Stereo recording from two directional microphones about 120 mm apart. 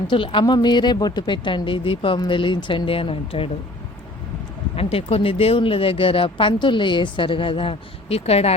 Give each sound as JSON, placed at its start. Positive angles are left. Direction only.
{"t": 0.1, "sound": "speech", "side_deg": 45}
{"t": 4.8, "sound": "speech", "side_deg": 55}